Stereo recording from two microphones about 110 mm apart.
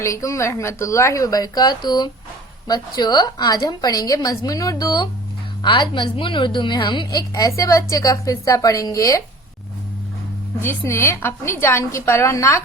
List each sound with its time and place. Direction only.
0.0 s a woman's voice: 30° left (ahead or behind)
5.6 s a woman's voice: 50° left (ahead or behind); by 9.2 s 30° left (ahead or behind)
10.6 s a woman's voice: 25° left (ahead or behind)